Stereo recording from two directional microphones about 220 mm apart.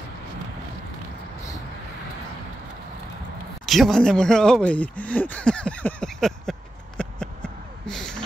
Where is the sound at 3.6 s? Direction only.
Centre (ahead or behind).